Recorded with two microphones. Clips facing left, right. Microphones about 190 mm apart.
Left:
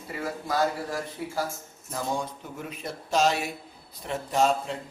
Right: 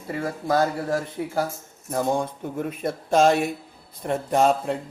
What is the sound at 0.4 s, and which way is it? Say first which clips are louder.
Speech: right 5 dB; 50° right (ahead or behind).